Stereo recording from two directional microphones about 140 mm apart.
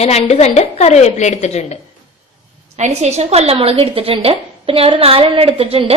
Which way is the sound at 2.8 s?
55° right (ahead or behind).